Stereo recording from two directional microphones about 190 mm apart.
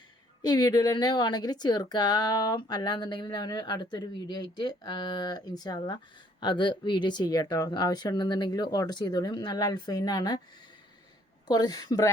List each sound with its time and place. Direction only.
0.4 s a woman's voice: 20° left (ahead or behind)
11.4 s a woman's voice: 20° left (ahead or behind)